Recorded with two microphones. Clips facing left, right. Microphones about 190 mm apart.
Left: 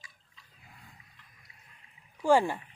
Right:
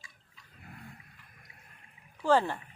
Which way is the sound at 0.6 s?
60° right (ahead or behind).